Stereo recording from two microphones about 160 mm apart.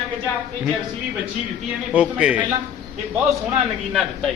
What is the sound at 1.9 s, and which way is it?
Speech, 5° right (ahead or behind).